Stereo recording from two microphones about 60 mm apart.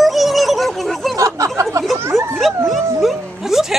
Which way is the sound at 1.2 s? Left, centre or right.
Right.